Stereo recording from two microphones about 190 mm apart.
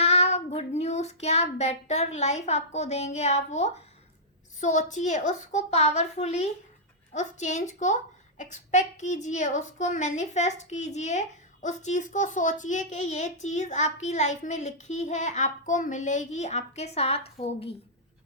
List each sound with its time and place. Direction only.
0.0 s child singing: 35° left (ahead or behind)
4.6 s a woman's voice: 40° left (ahead or behind)